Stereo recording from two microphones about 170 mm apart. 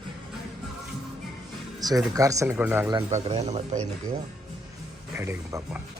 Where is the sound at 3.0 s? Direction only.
40° right (ahead or behind).